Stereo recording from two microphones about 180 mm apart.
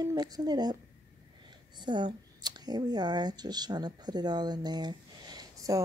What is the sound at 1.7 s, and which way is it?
Speech, 25° right (ahead or behind).